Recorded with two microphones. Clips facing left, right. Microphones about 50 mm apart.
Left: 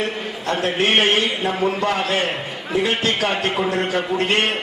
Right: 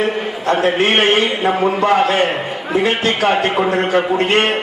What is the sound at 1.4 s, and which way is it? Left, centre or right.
A man's voice, centre.